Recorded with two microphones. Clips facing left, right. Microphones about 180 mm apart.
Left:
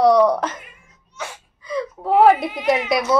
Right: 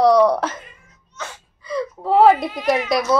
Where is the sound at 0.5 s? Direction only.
15° left (ahead or behind).